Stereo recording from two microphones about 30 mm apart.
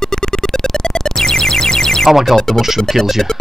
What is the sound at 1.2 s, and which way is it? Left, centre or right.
Music, centre.